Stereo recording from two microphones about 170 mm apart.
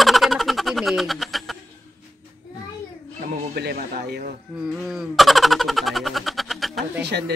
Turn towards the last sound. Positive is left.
turn(degrees=-75)  # may be behind; listen again after turning